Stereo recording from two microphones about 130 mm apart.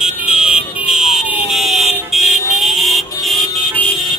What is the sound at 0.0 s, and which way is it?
Vehicle, 5° right (ahead or behind).